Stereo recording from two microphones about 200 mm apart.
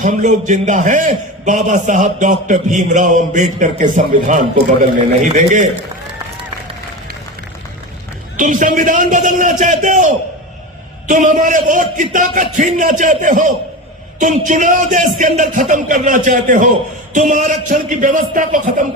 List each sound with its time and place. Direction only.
0.0 s a man's voice: 40° right (ahead or behind)
8.4 s a man's voice: 40° right (ahead or behind)
11.1 s a man's voice: 40° right (ahead or behind)